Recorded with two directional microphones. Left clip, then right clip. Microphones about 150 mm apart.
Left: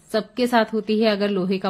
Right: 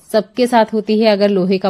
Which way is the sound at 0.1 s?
30° right (ahead or behind).